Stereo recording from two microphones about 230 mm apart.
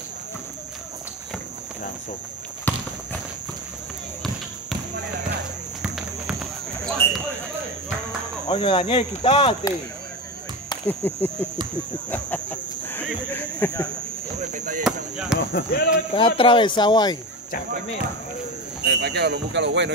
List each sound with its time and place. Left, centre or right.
5.8 s music: centre
7.0 s a sound: centre
8.5 s speech: left
10.7 s chop: centre
11.1 s a sound: centre
12.1 s speech: centre
14.4 s speech: right
14.8 s speech: centre
15.5 s speech: left
16.1 s speech: left
18.9 s speech: right